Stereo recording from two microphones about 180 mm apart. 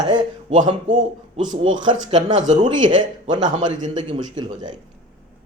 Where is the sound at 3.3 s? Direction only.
25° right (ahead or behind).